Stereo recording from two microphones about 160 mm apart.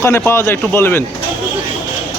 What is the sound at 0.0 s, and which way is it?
Speech, 15° left (ahead or behind).